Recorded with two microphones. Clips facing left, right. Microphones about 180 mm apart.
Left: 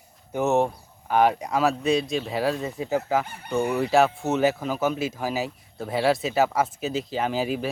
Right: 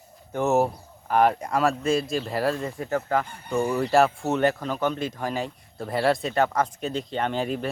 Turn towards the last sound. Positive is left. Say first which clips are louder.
# left 1 dB
turn(degrees=5)  # may be behind; listen again after turning